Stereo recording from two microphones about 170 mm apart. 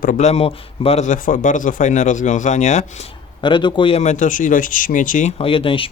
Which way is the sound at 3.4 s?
25° left (ahead or behind).